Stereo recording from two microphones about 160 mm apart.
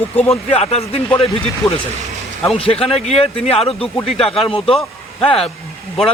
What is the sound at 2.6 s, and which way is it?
A man's voice, 40° left (ahead or behind).